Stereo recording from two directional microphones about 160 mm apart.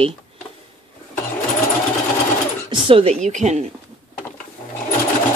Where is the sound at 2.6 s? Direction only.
35° right (ahead or behind).